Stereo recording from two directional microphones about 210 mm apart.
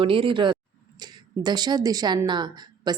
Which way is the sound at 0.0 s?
25° right (ahead or behind).